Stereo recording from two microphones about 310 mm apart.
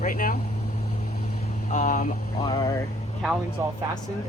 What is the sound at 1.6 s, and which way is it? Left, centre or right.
Speech, left.